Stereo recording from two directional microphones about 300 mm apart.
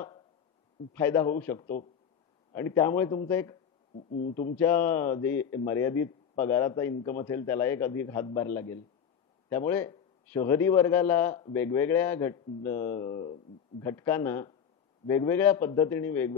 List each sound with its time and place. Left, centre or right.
0.9 s a man's voice: centre
4.1 s a man's voice: left
4.6 s a man's voice: centre